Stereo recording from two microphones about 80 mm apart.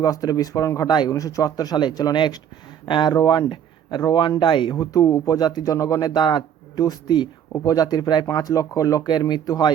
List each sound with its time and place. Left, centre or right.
0.0 s speech: left
0.9 s speech: left
1.1 s speech: left
2.8 s speech: left
3.1 s speech: left
4.4 s speech: left
4.8 s speech: left